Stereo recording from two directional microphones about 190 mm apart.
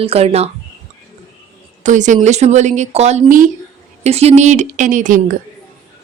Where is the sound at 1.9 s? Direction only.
40° right (ahead or behind).